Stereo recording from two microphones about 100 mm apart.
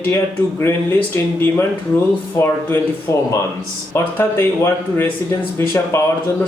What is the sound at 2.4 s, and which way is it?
Speech, 25° left (ahead or behind).